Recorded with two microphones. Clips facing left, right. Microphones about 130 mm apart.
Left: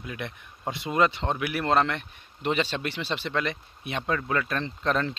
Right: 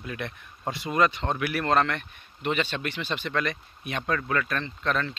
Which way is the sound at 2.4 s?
35° left (ahead or behind).